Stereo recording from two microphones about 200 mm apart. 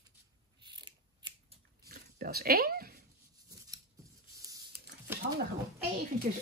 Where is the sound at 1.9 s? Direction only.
50° right (ahead or behind).